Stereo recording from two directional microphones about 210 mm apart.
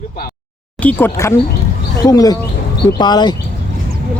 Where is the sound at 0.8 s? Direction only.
10° left (ahead or behind).